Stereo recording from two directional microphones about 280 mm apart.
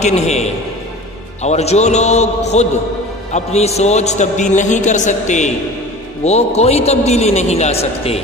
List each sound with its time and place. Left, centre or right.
0.0 s a man's voice: left